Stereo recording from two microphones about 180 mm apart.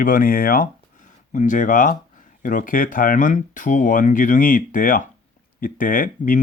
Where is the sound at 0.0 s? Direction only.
50° left (ahead or behind).